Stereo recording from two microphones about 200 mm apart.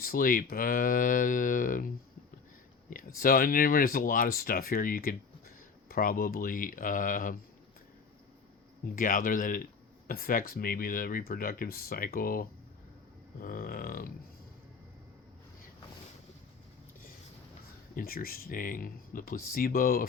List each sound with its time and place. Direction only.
0.0 s speech: 45° left (ahead or behind)
2.9 s speech: 45° left (ahead or behind)
9.0 s speech: 45° left (ahead or behind)
17.9 s speech: 45° left (ahead or behind)